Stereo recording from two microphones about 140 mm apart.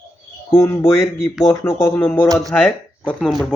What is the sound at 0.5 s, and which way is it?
Speech, 20° left (ahead or behind).